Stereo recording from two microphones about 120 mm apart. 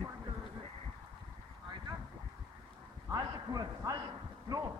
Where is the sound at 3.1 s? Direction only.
30° right (ahead or behind).